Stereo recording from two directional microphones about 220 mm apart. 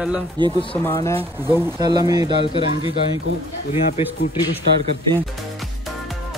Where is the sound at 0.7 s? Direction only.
10° left (ahead or behind).